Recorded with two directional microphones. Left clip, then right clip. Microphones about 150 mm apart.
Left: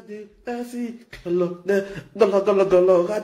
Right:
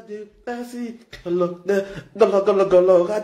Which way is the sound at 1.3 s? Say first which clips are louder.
Right 1 dB; 20° left (ahead or behind).